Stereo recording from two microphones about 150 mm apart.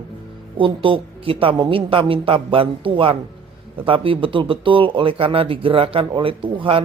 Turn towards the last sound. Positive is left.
turn(degrees=-35)  # may be behind; listen again after turning